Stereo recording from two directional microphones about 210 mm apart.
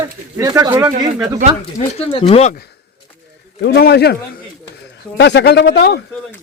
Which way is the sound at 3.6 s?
50° left (ahead or behind).